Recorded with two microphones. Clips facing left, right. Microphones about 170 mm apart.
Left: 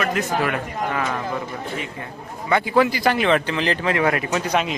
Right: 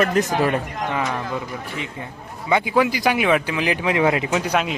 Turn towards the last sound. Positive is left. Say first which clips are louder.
# right 1 dB
turn(degrees=-10)  # may be behind; listen again after turning